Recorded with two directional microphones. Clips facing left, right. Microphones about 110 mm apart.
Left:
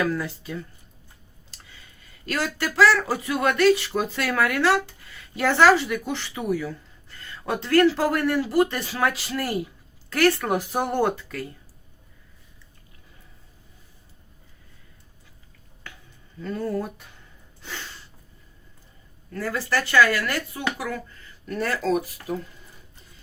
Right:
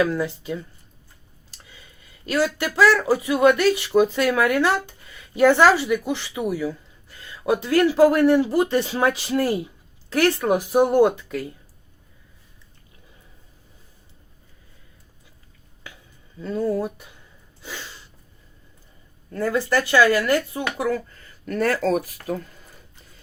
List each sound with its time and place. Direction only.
0.0 s speech: 15° right (ahead or behind)
2.2 s speech: 15° right (ahead or behind)
16.4 s speech: 15° right (ahead or behind)
19.3 s speech: 25° right (ahead or behind)
21.4 s speech: 50° right (ahead or behind)